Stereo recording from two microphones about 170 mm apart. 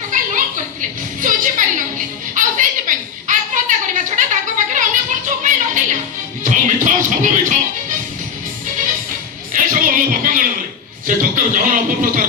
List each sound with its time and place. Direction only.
0.1 s a sound: 50° right (ahead or behind)
6.4 s music: 50° right (ahead or behind)
9.5 s music: 50° right (ahead or behind)